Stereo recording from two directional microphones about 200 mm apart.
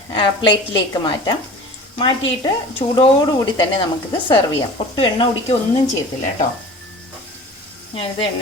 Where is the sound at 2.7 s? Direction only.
25° left (ahead or behind).